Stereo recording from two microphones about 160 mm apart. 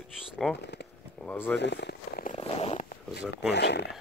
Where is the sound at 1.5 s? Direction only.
90° left.